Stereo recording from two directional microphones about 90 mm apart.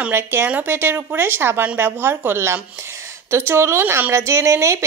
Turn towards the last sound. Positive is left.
turn(degrees=-35)  # may be behind; listen again after turning